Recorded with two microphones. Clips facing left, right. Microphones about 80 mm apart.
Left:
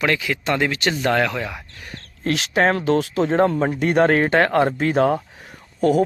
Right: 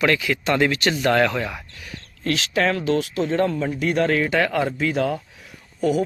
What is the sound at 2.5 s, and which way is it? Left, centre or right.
Speech, left.